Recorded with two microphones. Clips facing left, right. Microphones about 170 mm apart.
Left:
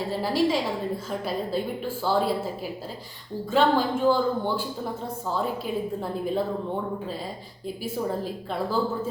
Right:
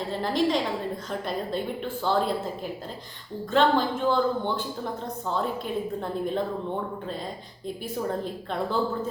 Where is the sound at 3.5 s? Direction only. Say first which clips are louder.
Even; 5° left (ahead or behind).